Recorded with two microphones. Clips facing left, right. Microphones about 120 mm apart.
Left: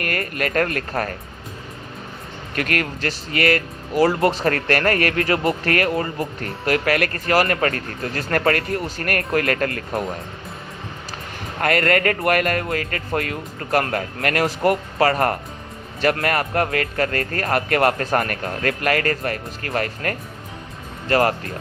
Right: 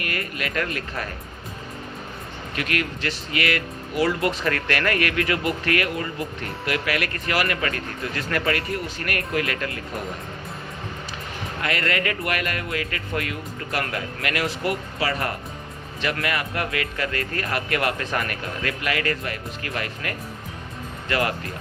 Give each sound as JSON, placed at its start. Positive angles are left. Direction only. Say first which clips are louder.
{"t": 0.0, "sound": "speech", "louder": "left 5 dB", "side_deg": 45}
{"t": 2.6, "sound": "speech", "louder": "left 4 dB", "side_deg": 45}
{"t": 11.6, "sound": "speech", "louder": "left 7 dB", "side_deg": 50}